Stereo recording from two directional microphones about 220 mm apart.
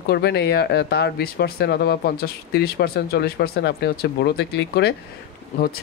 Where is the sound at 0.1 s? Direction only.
50° left (ahead or behind).